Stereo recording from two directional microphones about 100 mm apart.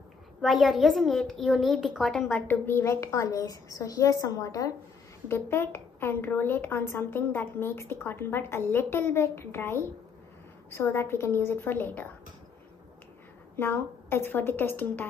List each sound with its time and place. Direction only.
0.4 s a woman's voice: centre (ahead or behind)
2.0 s a woman's voice: 10° left (ahead or behind); by 4.7 s 35° left (ahead or behind)
5.3 s a woman's voice: 25° left (ahead or behind)
13.6 s a woman's voice: 25° left (ahead or behind)